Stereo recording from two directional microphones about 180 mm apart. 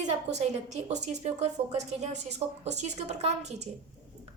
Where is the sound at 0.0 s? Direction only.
40° right (ahead or behind).